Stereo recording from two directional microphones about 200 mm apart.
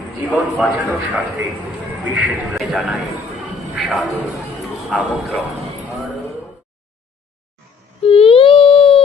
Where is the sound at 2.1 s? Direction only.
5° right (ahead or behind).